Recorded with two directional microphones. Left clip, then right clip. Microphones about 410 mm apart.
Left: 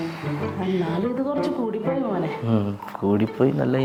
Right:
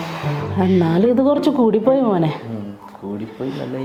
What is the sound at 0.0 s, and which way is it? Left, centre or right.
Music, right.